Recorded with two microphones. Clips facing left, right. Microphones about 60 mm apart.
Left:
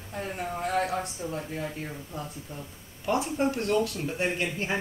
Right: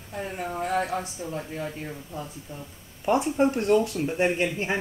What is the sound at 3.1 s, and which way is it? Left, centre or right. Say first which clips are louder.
Speech: right 4 dB; right.